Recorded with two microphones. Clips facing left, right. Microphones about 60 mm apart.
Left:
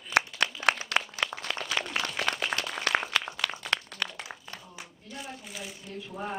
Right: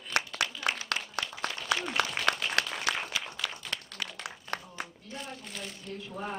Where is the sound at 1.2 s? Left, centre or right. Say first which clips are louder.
Left 8 dB; left.